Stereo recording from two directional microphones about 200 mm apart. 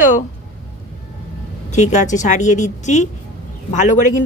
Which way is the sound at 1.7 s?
35° left (ahead or behind).